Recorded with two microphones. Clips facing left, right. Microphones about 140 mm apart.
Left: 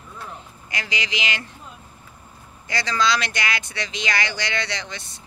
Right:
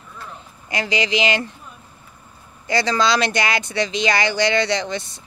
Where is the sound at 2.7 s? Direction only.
30° right (ahead or behind).